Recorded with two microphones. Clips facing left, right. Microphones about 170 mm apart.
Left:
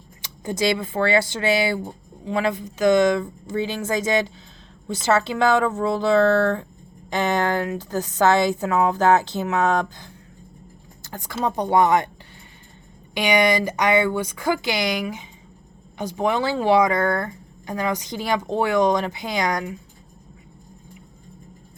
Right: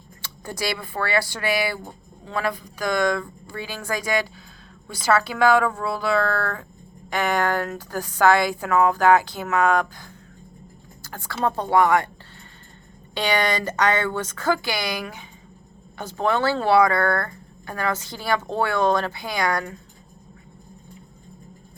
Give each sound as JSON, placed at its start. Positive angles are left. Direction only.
{"t": 0.2, "sound": "speech", "side_deg": 20}
{"t": 11.0, "sound": "speech", "side_deg": 15}
{"t": 13.1, "sound": "speech", "side_deg": 15}